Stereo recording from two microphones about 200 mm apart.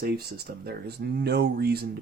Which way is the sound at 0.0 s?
50° right (ahead or behind).